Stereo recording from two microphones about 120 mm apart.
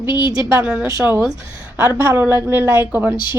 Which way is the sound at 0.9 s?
25° right (ahead or behind).